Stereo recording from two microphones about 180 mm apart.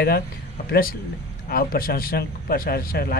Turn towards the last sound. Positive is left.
turn(degrees=55)  # may be behind; listen again after turning